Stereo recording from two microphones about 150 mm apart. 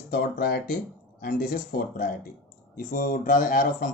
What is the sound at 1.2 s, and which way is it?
Speech, 70° left (ahead or behind).